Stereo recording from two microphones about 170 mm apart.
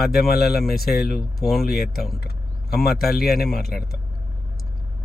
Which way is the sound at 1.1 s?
Centre (ahead or behind).